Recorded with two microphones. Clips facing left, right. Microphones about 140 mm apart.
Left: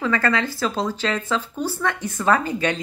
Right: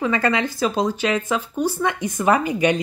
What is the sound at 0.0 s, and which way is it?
Speech, 15° right (ahead or behind).